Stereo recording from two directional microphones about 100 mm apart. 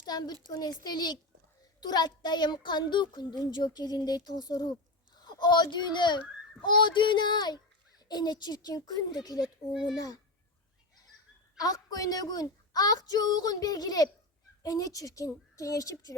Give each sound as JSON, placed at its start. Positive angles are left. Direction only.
{"t": 0.0, "sound": "a child's voice", "side_deg": 40}
{"t": 9.4, "sound": "speech", "side_deg": -5}
{"t": 9.9, "sound": "a woman's voice", "side_deg": 40}
{"t": 11.6, "sound": "a woman's voice", "side_deg": 40}